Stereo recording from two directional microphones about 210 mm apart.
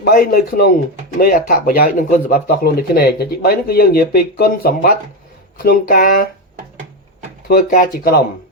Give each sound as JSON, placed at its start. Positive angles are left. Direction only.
{"t": 0.0, "sound": "speech", "side_deg": 45}
{"t": 7.4, "sound": "speech", "side_deg": 45}